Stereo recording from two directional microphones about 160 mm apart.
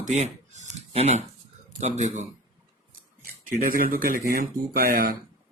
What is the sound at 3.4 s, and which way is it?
Speech, 60° right (ahead or behind).